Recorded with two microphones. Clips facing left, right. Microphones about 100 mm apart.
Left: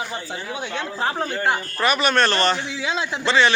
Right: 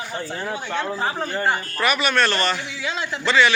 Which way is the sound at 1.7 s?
25° left (ahead or behind).